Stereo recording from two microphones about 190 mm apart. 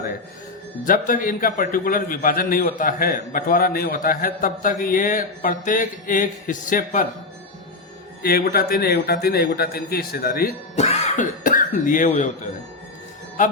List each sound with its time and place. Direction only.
0.9 s a man's voice: 45° left (ahead or behind)
8.2 s a man's voice: 50° left (ahead or behind)
10.8 s speech: 35° left (ahead or behind)
13.4 s speech: 40° left (ahead or behind)